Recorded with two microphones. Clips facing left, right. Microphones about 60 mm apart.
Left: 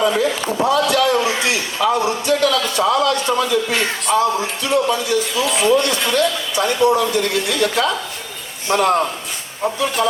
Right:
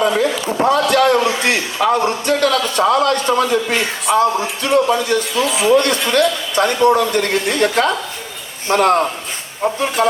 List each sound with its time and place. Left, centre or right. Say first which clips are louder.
0.6 s a man's voice: right 3 dB; right
5.5 s speech: even; centre
5.7 s a man's voice: right 3 dB; right